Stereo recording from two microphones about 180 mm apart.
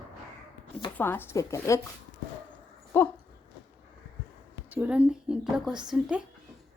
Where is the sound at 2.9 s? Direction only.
10° left (ahead or behind).